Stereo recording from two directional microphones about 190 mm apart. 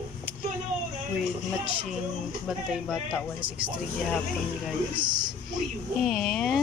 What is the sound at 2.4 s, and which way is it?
Speech, 5° right (ahead or behind).